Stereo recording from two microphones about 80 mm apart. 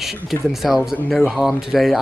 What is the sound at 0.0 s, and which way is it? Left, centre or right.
Speech, centre.